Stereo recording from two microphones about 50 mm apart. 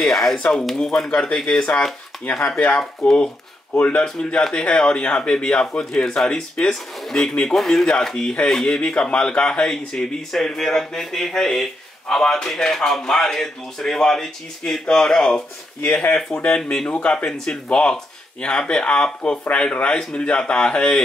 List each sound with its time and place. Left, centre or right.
0.0 s speech: centre
1.1 s speech: left
16.4 s speech: left